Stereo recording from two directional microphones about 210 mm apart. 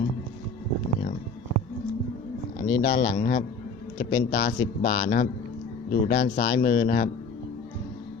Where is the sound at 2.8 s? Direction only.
35° left (ahead or behind).